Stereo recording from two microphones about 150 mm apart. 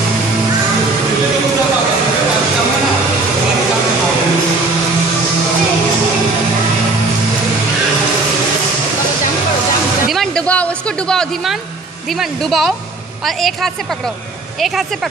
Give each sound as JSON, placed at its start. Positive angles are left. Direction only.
{"t": 10.0, "sound": "music", "side_deg": 0}
{"t": 12.2, "sound": "speech", "side_deg": 0}